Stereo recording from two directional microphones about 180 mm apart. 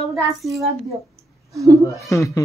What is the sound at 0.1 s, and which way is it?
Speech, centre (ahead or behind).